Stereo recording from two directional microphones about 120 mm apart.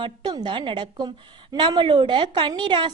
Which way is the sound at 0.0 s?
40° right (ahead or behind).